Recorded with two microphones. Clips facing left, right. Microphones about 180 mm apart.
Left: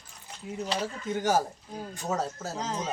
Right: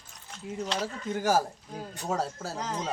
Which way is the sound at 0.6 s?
5° left (ahead or behind).